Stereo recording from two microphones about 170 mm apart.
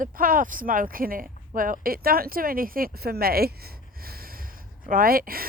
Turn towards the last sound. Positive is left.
turn(degrees=-60)  # may be behind; listen again after turning